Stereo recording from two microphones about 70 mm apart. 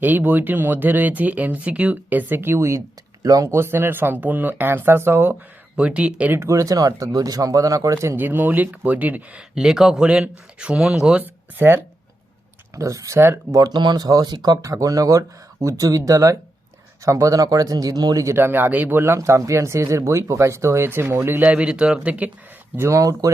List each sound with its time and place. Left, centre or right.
0.0 s speech: right
5.7 s speech: centre
6.5 s speech: right
8.1 s speech: right
9.6 s speech: centre
11.2 s speech: right
12.7 s speech: right
13.1 s speech: right
13.5 s speech: right
14.6 s speech: right
18.3 s speech: right
21.4 s speech: centre
22.7 s speech: right